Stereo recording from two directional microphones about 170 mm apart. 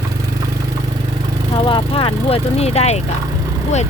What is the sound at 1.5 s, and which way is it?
Speech, 30° left (ahead or behind).